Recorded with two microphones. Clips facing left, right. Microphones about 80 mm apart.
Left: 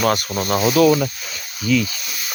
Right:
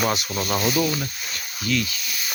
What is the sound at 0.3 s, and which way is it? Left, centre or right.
Speech, left.